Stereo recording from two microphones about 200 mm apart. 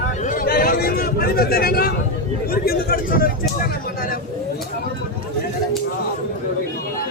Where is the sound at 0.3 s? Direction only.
45° left (ahead or behind).